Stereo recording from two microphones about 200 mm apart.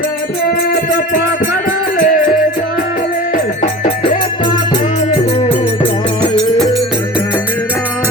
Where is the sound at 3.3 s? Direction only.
40° left (ahead or behind).